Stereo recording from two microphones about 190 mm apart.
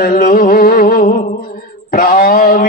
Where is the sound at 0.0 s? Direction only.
45° left (ahead or behind).